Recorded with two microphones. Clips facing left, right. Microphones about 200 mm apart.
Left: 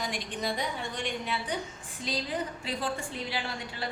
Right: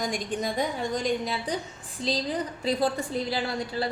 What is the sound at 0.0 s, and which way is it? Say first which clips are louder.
A woman's voice: right 5 dB; 45° right (ahead or behind).